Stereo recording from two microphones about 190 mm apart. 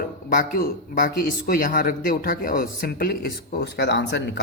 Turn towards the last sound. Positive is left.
turn(degrees=60)  # may be behind; listen again after turning